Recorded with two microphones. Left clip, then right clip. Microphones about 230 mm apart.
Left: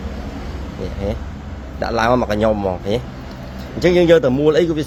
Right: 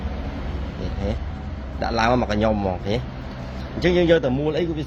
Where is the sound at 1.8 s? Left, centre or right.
Left.